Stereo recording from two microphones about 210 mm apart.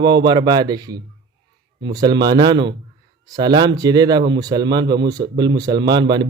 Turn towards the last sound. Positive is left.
turn(degrees=-20)  # may be behind; listen again after turning